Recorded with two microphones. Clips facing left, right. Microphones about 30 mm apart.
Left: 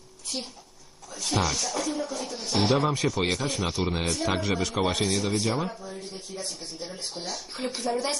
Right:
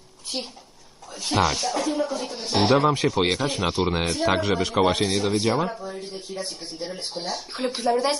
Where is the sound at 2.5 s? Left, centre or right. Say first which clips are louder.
Right 5 dB; right.